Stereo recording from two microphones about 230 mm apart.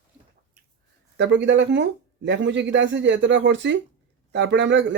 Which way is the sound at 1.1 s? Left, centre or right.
Right.